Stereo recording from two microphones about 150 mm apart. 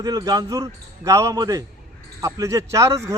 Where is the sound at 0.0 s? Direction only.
25° right (ahead or behind).